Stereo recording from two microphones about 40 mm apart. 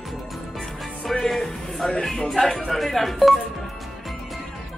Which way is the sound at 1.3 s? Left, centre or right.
Centre.